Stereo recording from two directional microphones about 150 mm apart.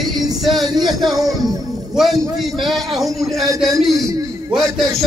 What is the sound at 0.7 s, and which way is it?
Speech, 30° right (ahead or behind).